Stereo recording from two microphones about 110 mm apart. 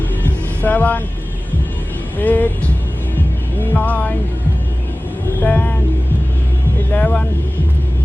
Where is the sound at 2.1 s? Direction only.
15° left (ahead or behind).